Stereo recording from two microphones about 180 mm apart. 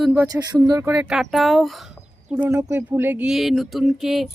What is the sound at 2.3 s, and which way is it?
A woman's voice, 15° right (ahead or behind).